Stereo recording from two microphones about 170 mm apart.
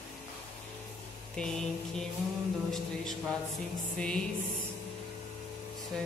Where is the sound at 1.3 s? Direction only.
5° left (ahead or behind).